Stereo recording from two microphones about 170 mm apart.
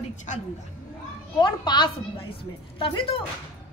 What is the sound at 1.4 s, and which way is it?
A woman's voice, 25° left (ahead or behind).